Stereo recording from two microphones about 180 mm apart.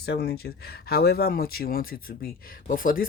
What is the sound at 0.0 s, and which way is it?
Speech, 60° left (ahead or behind).